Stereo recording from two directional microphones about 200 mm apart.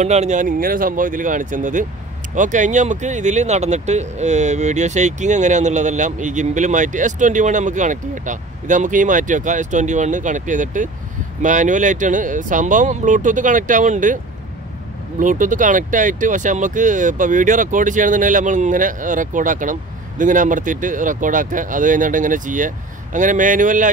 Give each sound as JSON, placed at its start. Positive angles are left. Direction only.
{"t": 0.0, "sound": "speech", "side_deg": -35}
{"t": 15.1, "sound": "speech", "side_deg": -40}